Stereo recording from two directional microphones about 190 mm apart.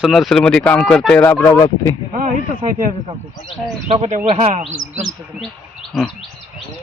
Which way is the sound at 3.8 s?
30° right (ahead or behind).